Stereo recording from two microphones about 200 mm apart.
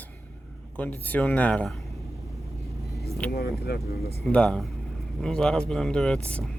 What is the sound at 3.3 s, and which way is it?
Speech, 50° left (ahead or behind).